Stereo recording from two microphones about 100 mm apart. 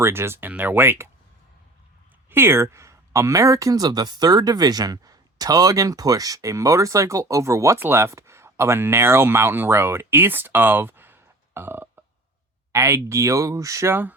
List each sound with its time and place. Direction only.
0.0 s speech: 25° right (ahead or behind)
2.3 s speech: 25° right (ahead or behind)